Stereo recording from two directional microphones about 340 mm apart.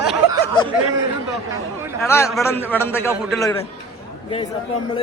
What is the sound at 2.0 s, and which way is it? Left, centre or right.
A man's voice, centre.